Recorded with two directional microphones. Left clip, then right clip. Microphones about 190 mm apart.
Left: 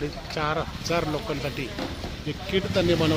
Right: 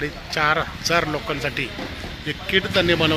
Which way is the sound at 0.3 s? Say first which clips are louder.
Right 8 dB; 5° right (ahead or behind).